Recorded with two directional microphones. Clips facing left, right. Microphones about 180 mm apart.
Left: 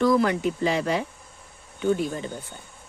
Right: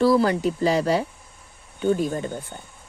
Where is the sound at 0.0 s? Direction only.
30° right (ahead or behind).